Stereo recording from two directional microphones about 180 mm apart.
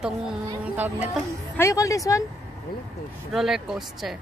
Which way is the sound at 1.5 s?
15° left (ahead or behind).